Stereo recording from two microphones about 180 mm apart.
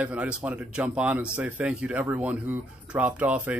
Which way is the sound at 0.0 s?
10° right (ahead or behind).